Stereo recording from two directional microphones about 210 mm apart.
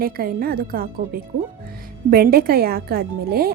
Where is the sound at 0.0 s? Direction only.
45° right (ahead or behind).